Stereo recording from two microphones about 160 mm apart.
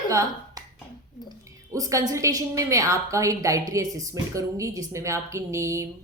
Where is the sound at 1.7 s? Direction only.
20° right (ahead or behind).